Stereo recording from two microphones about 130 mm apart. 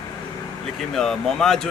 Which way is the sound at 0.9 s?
5° left (ahead or behind).